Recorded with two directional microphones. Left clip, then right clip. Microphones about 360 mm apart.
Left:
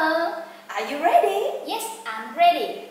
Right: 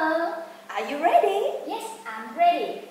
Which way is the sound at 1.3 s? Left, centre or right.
Centre.